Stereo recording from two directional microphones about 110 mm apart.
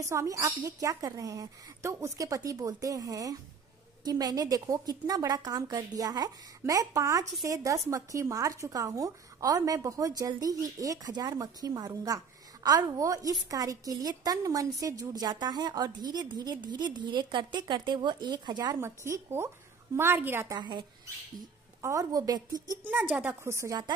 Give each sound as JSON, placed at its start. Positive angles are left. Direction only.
{"t": 0.0, "sound": "a woman's voice", "side_deg": -25}
{"t": 18.8, "sound": "speech", "side_deg": -25}
{"t": 20.5, "sound": "speech", "side_deg": -45}
{"t": 21.8, "sound": "a woman's voice", "side_deg": -30}